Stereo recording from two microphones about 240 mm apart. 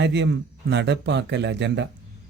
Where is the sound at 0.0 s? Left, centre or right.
Right.